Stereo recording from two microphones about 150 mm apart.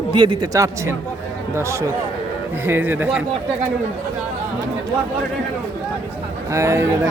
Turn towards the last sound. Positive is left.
turn(degrees=-15)  # may be behind; listen again after turning